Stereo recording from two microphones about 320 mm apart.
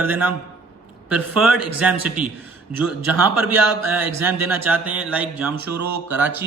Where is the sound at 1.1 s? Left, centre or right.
Right.